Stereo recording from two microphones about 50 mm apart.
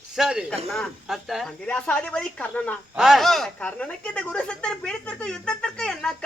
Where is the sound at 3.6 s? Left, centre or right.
Left.